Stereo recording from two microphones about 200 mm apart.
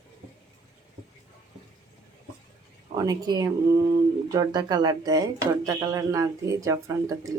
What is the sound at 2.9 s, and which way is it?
Speech, 20° right (ahead or behind).